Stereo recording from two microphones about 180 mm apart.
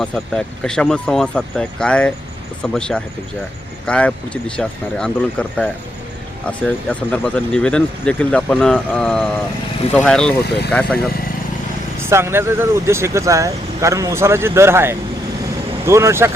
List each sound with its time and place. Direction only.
0.0 s speech: 5° left (ahead or behind)
12.0 s speech: 15° right (ahead or behind)